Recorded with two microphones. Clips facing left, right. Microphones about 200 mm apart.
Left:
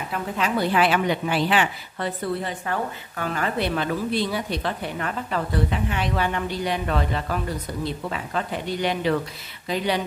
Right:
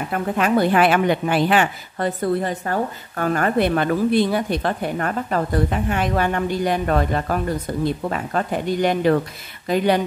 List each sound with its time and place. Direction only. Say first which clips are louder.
0.1 s a woman's voice: right 6 dB; 55° right (ahead or behind)